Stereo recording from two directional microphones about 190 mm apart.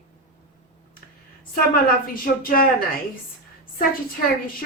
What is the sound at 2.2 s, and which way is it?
Speech, 50° left (ahead or behind).